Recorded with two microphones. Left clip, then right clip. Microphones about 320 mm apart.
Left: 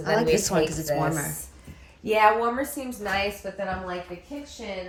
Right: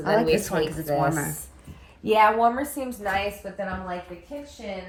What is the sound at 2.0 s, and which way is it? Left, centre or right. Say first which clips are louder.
Speech: right 2 dB; centre.